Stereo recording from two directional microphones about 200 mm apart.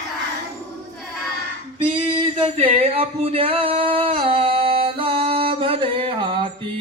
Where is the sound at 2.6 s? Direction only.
30° right (ahead or behind).